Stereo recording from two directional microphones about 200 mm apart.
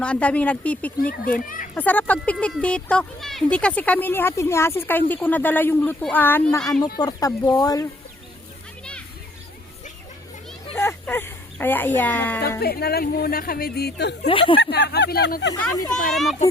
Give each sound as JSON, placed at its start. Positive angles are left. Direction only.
{"t": 0.0, "sound": "speech", "side_deg": 5}
{"t": 1.2, "sound": "speech", "side_deg": 45}
{"t": 1.7, "sound": "speech", "side_deg": 10}
{"t": 8.8, "sound": "children playing", "side_deg": 5}
{"t": 10.8, "sound": "a sound", "side_deg": 10}
{"t": 12.5, "sound": "speech", "side_deg": 50}
{"t": 14.3, "sound": "speech", "side_deg": 25}
{"t": 14.6, "sound": "speech", "side_deg": 55}
{"t": 16.1, "sound": "a child's voice", "side_deg": 0}